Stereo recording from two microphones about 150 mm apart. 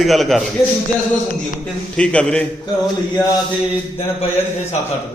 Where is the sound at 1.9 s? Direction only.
5° left (ahead or behind).